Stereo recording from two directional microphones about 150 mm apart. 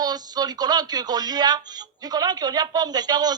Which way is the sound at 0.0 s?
25° right (ahead or behind).